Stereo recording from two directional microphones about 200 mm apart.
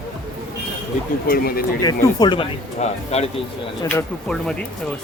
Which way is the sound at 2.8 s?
35° left (ahead or behind).